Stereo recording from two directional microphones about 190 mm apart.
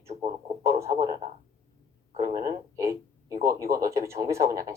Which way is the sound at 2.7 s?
15° right (ahead or behind).